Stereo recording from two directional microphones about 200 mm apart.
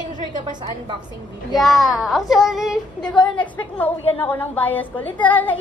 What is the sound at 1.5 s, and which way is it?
A woman's voice, centre (ahead or behind).